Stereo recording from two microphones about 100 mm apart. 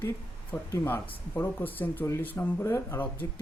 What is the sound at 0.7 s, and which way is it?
Speech, 20° left (ahead or behind).